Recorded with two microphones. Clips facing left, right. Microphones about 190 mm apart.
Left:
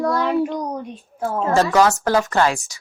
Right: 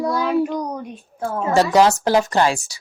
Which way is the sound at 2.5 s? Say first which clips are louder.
Right 1 dB; 35° right (ahead or behind).